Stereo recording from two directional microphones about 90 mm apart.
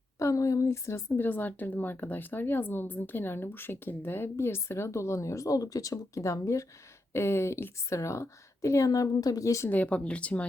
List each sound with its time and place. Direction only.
0.2 s a woman's voice: 35° left (ahead or behind)
9.6 s speech: 15° left (ahead or behind)